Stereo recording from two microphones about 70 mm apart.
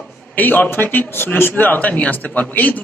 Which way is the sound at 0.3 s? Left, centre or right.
Left.